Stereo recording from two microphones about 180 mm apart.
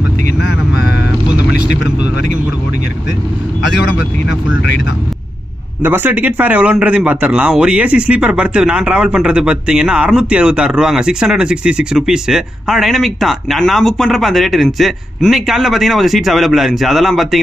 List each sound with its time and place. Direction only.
3.6 s speech: 70° left (ahead or behind)
5.8 s a man's voice: 10° right (ahead or behind)